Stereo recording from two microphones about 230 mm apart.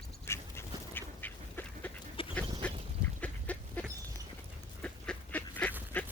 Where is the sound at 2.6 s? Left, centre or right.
Centre.